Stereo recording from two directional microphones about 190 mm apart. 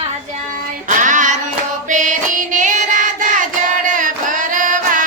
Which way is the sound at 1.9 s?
40° right (ahead or behind).